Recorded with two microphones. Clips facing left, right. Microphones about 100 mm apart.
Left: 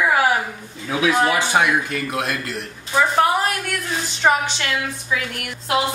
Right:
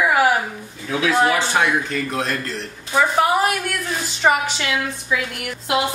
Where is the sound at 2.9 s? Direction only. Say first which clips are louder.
Even; centre (ahead or behind).